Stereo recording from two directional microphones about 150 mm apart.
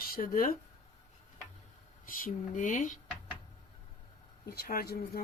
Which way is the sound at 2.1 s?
65° left (ahead or behind).